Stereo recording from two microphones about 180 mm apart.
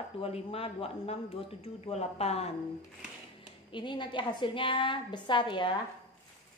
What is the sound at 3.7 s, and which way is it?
A woman's voice, 25° left (ahead or behind).